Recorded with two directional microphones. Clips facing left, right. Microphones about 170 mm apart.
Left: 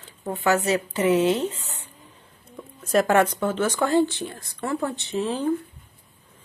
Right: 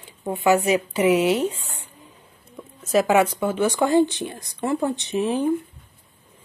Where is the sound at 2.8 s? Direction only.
5° right (ahead or behind).